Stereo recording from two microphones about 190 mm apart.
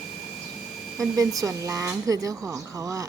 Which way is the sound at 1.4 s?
15° right (ahead or behind).